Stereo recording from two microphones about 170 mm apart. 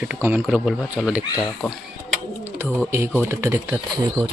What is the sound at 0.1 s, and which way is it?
Speech, 10° right (ahead or behind).